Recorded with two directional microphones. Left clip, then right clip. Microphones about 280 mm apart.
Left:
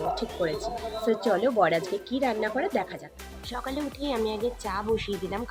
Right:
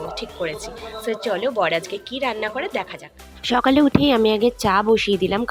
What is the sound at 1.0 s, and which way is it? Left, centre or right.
Speech, centre.